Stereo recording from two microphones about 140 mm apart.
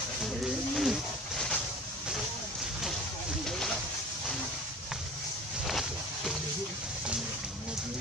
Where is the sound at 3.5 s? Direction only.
5° left (ahead or behind).